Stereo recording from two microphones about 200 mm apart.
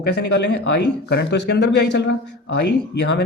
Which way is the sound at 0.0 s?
60° left (ahead or behind).